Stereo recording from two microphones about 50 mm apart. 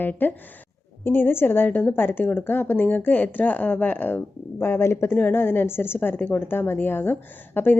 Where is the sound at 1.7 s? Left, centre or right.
Left.